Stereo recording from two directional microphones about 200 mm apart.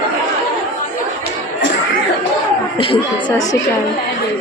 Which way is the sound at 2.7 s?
25° left (ahead or behind).